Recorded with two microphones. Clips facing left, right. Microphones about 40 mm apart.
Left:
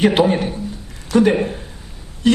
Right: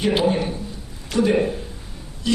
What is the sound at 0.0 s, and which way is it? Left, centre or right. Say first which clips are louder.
A man's voice: left 5 dB; left.